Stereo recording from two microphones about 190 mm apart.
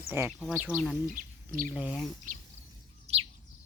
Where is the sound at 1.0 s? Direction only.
45° right (ahead or behind).